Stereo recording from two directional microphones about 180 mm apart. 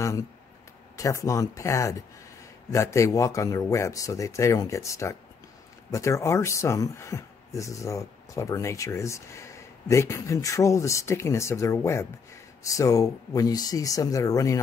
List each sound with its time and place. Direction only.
0.9 s speech: 15° left (ahead or behind)